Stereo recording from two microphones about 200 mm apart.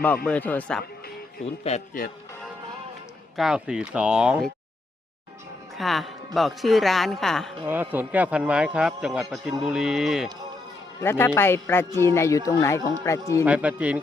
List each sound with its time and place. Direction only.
0.3 s speech: 10° left (ahead or behind)
1.6 s a man's voice: 35° left (ahead or behind)
3.3 s a woman's voice: 5° right (ahead or behind)
5.7 s a woman's voice: centre (ahead or behind)
7.6 s a woman's voice: 10° right (ahead or behind)
11.0 s speech: 10° left (ahead or behind)
13.4 s speech: 5° right (ahead or behind)